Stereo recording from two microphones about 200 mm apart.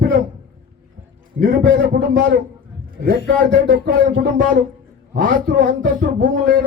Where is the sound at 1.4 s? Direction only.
55° right (ahead or behind).